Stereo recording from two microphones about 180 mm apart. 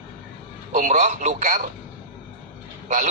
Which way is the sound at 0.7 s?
45° right (ahead or behind).